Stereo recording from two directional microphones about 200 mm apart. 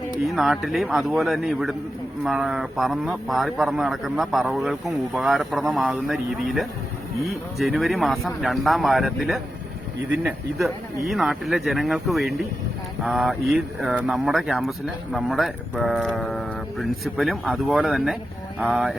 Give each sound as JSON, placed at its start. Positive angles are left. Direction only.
{"t": 0.3, "sound": "a man's voice", "side_deg": 0}
{"t": 7.3, "sound": "a man's voice", "side_deg": 0}